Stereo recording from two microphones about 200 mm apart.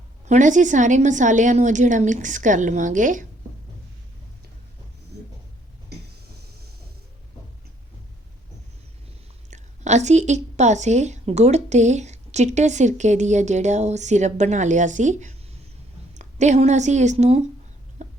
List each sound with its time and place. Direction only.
0.3 s a woman's voice: 40° right (ahead or behind)
5.9 s a sound: 55° right (ahead or behind)
9.5 s a woman's voice: 35° right (ahead or behind)
18.0 s chicken: 35° right (ahead or behind)